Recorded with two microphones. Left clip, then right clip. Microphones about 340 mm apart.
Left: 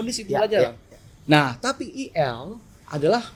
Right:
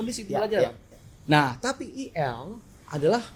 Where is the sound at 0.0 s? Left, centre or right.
Left.